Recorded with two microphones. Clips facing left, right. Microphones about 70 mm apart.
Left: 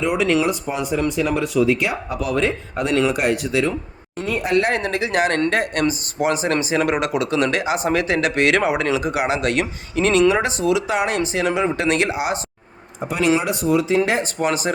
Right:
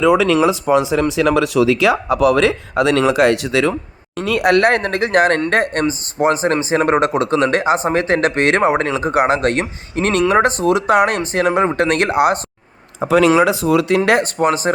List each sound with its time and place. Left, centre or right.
0.6 s speech: right
4.2 s speech: right
13.7 s speech: right
14.3 s speech: right